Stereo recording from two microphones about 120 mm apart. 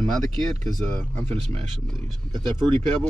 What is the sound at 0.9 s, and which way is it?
Speech, 15° left (ahead or behind).